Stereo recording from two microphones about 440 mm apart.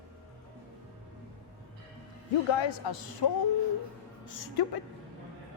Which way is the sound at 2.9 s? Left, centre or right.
Left.